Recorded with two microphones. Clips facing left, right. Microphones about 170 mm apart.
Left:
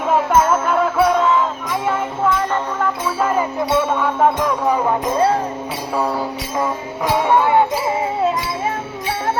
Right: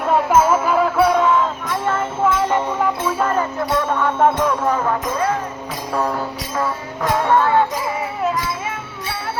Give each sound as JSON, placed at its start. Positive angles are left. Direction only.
{"t": 0.1, "sound": "music", "side_deg": 0}
{"t": 2.2, "sound": "music", "side_deg": -10}
{"t": 3.1, "sound": "speech", "side_deg": 5}
{"t": 4.6, "sound": "speech", "side_deg": 15}
{"t": 5.0, "sound": "speech", "side_deg": 30}
{"t": 5.9, "sound": "speech", "side_deg": 10}
{"t": 8.2, "sound": "music", "side_deg": 30}